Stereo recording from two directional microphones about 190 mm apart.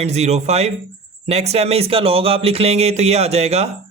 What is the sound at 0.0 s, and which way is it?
A man's voice, 35° right (ahead or behind).